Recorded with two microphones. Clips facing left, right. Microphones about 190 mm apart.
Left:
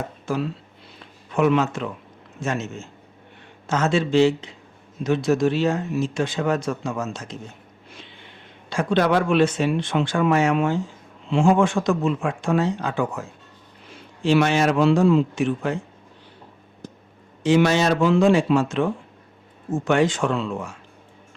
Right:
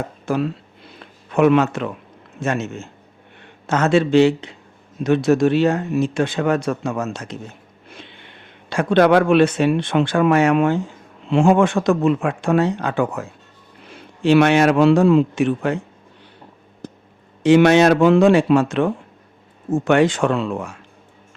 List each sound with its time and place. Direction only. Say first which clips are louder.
0.3 s speech: right 5 dB; 60° right (ahead or behind)
16.8 s a sound: right 4 dB; 65° right (ahead or behind)
17.4 s speech: right 6 dB; 65° right (ahead or behind)